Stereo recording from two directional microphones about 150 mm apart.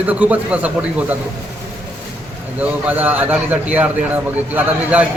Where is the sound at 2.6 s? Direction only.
10° right (ahead or behind).